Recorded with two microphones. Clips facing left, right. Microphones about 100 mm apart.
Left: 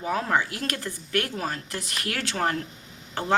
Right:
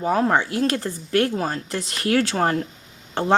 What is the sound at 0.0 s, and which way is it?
Speech, 35° right (ahead or behind).